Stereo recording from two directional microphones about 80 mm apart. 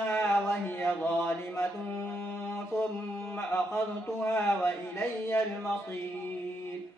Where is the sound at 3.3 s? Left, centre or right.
Left.